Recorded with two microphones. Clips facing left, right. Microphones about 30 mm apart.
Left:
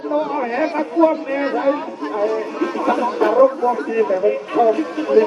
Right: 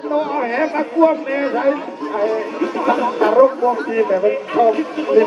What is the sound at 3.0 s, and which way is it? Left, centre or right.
A man's voice, right.